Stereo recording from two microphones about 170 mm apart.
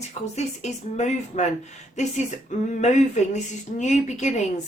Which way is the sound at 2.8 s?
45° left (ahead or behind).